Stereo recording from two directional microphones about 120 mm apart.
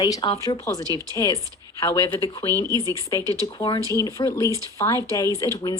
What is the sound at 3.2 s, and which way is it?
Speech, 30° right (ahead or behind).